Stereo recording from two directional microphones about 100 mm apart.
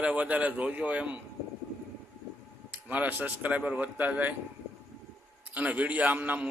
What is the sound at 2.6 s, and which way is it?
A man's voice, 20° right (ahead or behind).